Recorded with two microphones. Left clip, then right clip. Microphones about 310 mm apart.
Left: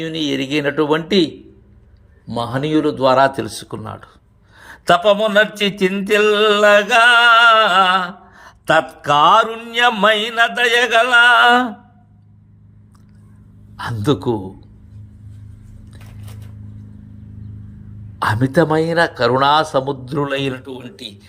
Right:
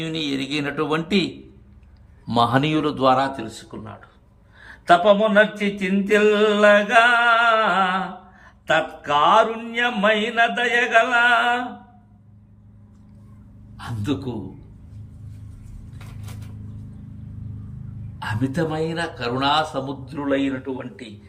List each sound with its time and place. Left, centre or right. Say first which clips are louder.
0.0 s speech: left 5 dB; centre
3.6 s mantra: left 8 dB; centre
13.7 s mantra: left 9 dB; centre
18.2 s mantra: left 10 dB; centre